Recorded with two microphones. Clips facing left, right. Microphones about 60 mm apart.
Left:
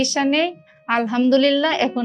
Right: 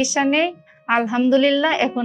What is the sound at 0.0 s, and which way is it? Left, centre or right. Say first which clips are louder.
Speech: even; centre.